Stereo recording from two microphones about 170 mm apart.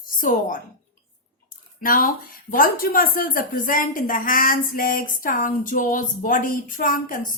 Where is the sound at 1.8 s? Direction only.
55° left (ahead or behind).